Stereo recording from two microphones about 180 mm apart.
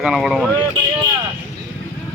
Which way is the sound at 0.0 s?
Centre (ahead or behind).